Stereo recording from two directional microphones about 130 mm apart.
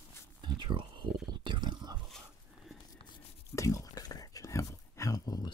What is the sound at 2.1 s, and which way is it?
Dog, 5° left (ahead or behind).